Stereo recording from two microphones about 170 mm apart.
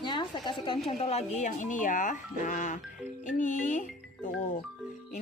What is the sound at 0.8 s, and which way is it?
Speech, 40° left (ahead or behind).